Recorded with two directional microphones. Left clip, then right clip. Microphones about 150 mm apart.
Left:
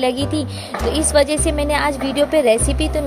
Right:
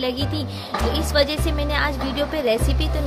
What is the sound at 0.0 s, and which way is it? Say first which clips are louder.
Speech: left 6 dB; 35° left (ahead or behind).